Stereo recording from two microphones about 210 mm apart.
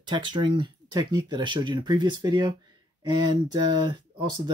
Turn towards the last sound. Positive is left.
turn(degrees=-20)  # may be behind; listen again after turning